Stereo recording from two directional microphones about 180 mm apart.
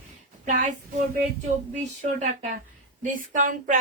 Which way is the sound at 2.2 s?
40° right (ahead or behind).